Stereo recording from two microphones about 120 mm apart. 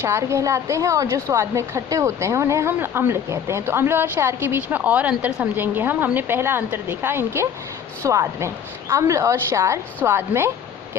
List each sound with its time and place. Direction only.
0.0 s a woman's voice: 20° right (ahead or behind)